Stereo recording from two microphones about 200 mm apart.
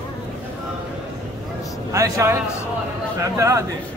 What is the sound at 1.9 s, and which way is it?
Speech, 15° right (ahead or behind).